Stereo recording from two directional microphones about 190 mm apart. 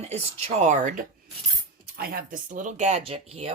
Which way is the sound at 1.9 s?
50° right (ahead or behind).